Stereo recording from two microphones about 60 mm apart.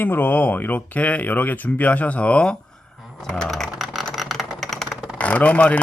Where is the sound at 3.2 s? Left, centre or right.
Centre.